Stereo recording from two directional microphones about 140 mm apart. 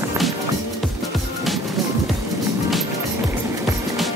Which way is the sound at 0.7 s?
Centre (ahead or behind).